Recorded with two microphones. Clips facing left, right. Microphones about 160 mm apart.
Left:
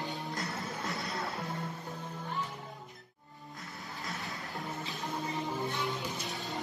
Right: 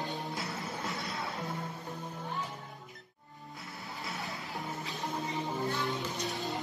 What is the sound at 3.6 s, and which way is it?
Music, centre (ahead or behind).